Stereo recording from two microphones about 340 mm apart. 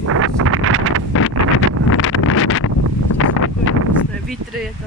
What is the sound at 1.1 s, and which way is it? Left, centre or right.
Wind noise, left.